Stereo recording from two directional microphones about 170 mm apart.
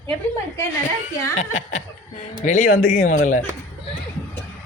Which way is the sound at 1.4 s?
45° left (ahead or behind).